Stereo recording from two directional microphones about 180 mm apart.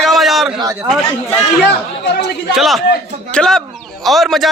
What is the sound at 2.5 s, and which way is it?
Speech, centre (ahead or behind).